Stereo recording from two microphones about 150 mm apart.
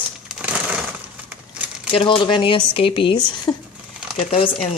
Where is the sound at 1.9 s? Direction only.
35° left (ahead or behind).